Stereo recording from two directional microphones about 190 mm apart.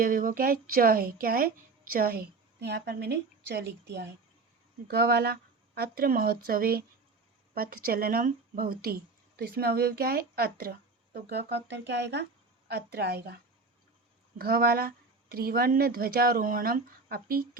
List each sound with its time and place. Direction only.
0.0 s a woman's voice: 45° right (ahead or behind)